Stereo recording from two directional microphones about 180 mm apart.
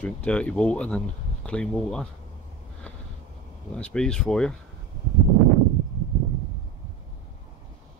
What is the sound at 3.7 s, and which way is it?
Speech, 5° left (ahead or behind).